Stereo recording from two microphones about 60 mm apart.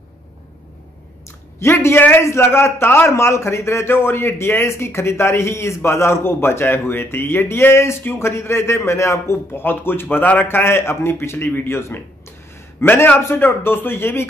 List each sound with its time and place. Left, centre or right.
1.6 s a man's voice: left